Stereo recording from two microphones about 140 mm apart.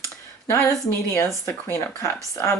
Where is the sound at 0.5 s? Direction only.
20° left (ahead or behind).